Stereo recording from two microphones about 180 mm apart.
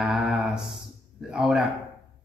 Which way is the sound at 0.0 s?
5° right (ahead or behind).